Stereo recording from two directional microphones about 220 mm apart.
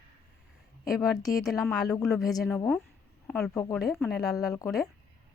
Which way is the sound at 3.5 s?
15° left (ahead or behind).